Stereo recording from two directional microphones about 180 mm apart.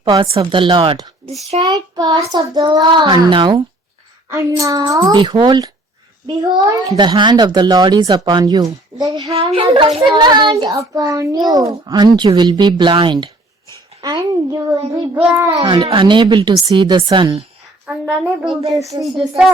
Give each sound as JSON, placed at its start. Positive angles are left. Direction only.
{"t": 0.0, "sound": "a child's voice", "side_deg": -30}
{"t": 9.3, "sound": "a child's voice", "side_deg": -30}
{"t": 15.6, "sound": "a child's voice", "side_deg": -25}
{"t": 17.8, "sound": "a child's voice", "side_deg": -5}
{"t": 18.8, "sound": "a child's voice", "side_deg": -20}